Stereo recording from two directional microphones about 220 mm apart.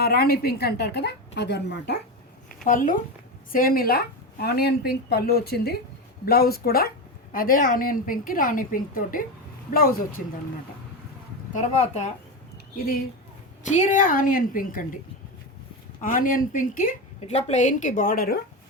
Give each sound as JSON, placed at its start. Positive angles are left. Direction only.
{"t": 0.0, "sound": "speech", "side_deg": 45}
{"t": 2.6, "sound": "a woman's voice", "side_deg": 40}
{"t": 11.5, "sound": "a woman's voice", "side_deg": 30}
{"t": 13.7, "sound": "a woman's voice", "side_deg": 35}
{"t": 16.0, "sound": "a woman's voice", "side_deg": 40}